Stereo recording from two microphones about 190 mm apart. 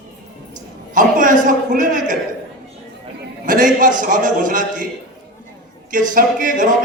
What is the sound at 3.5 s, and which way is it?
Speech, 45° right (ahead or behind).